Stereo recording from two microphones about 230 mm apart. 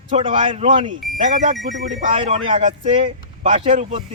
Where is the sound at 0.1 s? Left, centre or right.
Right.